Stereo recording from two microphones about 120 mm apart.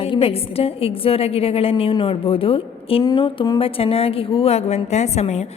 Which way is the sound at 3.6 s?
55° left (ahead or behind).